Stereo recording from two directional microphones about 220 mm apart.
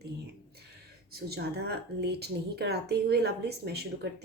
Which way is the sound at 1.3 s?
50° right (ahead or behind).